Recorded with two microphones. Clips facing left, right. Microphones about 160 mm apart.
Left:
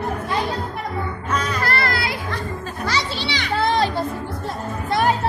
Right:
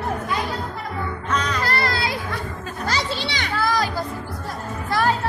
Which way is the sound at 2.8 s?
45° right (ahead or behind).